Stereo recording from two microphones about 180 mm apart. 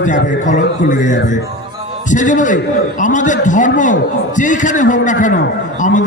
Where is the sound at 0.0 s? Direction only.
45° left (ahead or behind).